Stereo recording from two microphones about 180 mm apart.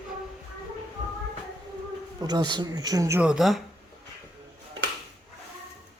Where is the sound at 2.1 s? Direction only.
20° right (ahead or behind); by 3.6 s centre (ahead or behind).